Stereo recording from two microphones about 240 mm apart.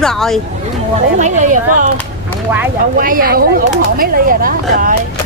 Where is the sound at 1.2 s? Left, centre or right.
Right.